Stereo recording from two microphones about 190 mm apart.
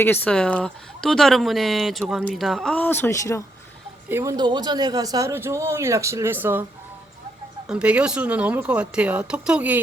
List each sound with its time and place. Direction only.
0.0 s speech: 10° left (ahead or behind)
4.1 s speech: 15° right (ahead or behind)
7.7 s speech: 5° right (ahead or behind)